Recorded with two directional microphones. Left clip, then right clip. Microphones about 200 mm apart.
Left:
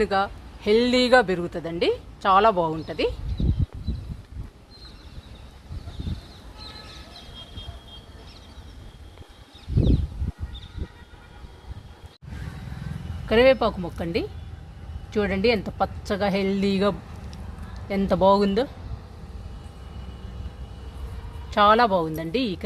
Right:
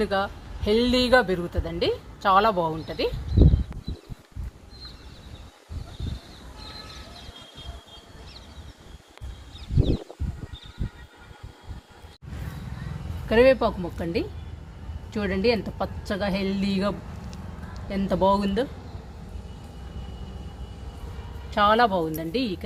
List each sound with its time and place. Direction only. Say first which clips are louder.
0.0 s a man's voice: left 2 dB; 45° left (ahead or behind)
13.2 s a woman's voice: left 1 dB; 30° left (ahead or behind)
21.5 s a woman's voice: left 2 dB; 40° left (ahead or behind)